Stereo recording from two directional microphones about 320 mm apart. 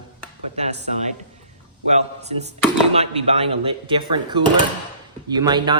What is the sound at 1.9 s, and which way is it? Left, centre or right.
A man's voice, right.